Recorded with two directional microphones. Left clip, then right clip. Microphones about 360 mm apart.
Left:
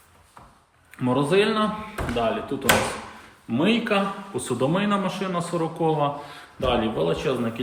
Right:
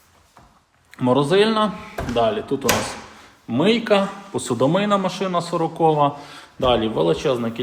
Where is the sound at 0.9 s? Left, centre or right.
Centre.